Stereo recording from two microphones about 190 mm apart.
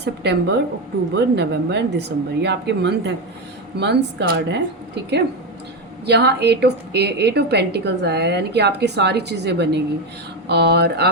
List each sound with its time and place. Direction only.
0.0 s a woman's voice: 60° right (ahead or behind)
6.1 s a woman's voice: 60° right (ahead or behind)